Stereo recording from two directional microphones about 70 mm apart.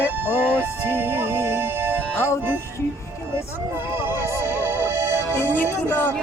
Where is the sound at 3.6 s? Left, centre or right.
Right.